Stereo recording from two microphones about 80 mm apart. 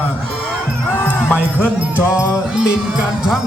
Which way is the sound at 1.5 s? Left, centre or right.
Right.